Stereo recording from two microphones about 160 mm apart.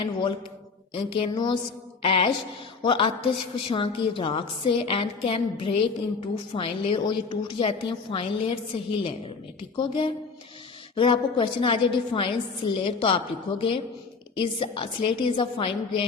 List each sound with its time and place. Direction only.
0.0 s a man's voice: 30° left (ahead or behind)